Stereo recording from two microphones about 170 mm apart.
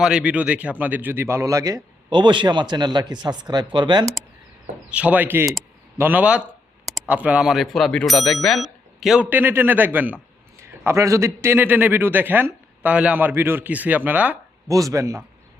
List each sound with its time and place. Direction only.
0.0 s a man's voice: 5° right (ahead or behind); by 4.0 s 25° right (ahead or behind)
4.9 s a man's voice: 10° right (ahead or behind)
9.3 s a man's voice: 10° right (ahead or behind)